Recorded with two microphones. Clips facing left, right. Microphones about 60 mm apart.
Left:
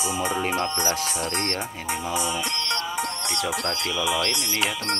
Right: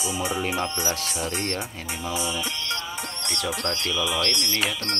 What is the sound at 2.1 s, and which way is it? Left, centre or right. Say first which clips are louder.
Music: left 1 dB; left.